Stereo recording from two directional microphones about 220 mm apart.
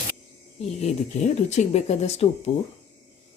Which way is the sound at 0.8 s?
30° left (ahead or behind).